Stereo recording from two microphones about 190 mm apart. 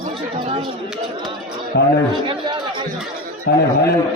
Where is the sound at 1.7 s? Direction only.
60° left (ahead or behind).